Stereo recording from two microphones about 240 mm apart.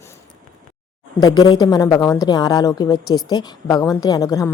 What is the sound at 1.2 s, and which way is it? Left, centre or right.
A woman's voice, centre.